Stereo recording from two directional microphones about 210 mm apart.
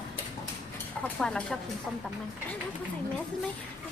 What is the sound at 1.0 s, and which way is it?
Speech, 5° left (ahead or behind).